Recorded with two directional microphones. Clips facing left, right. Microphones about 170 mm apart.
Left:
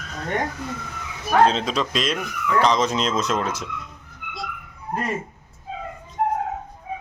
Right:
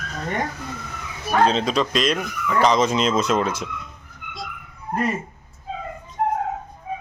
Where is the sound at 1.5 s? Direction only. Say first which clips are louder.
Right 2 dB; centre (ahead or behind).